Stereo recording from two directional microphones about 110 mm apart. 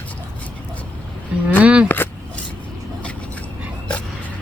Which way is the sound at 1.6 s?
10° right (ahead or behind).